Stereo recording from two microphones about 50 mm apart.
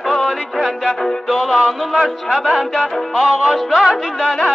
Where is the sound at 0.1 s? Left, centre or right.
Centre.